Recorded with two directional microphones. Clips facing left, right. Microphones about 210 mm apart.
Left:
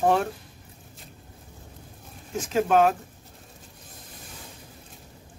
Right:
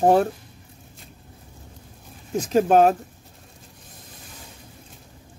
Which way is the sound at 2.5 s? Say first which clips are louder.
Right 4 dB; 40° right (ahead or behind).